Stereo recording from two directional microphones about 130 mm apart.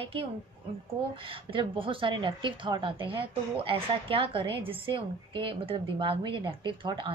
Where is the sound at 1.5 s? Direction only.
40° right (ahead or behind).